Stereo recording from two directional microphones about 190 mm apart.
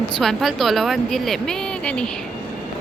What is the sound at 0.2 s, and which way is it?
Speech, centre (ahead or behind).